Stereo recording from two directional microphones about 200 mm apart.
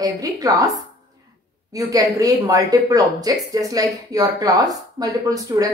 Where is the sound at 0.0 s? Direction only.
15° right (ahead or behind).